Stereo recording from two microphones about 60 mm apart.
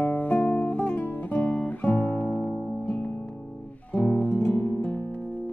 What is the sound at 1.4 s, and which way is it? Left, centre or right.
Guitar, left.